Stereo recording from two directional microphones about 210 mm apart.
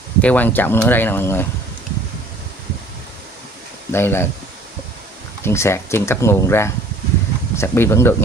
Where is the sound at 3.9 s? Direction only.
10° left (ahead or behind).